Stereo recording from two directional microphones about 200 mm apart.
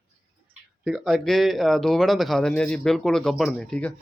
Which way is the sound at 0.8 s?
Centre (ahead or behind).